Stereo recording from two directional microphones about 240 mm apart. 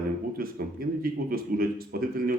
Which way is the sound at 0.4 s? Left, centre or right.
Right.